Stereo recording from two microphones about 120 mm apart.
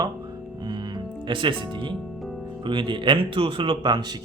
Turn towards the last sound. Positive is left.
turn(degrees=-40)  # may be behind; listen again after turning